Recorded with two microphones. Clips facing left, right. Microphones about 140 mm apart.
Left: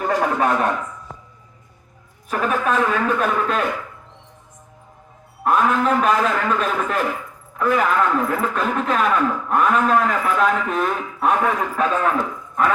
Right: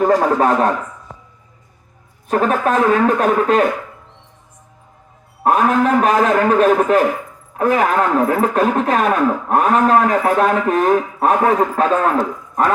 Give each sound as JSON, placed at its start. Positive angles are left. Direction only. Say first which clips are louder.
{"t": 0.0, "sound": "a man's voice", "louder": "right 6 dB", "side_deg": -40}
{"t": 2.3, "sound": "a man's voice", "louder": "right 5 dB", "side_deg": -40}
{"t": 5.4, "sound": "speech", "louder": "right 4 dB", "side_deg": -50}